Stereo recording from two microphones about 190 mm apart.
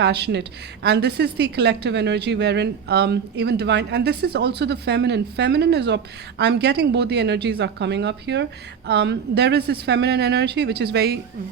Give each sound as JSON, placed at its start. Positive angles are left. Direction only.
{"t": 0.0, "sound": "a woman's voice", "side_deg": -60}